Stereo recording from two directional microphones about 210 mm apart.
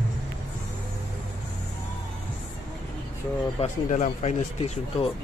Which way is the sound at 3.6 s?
35° left (ahead or behind).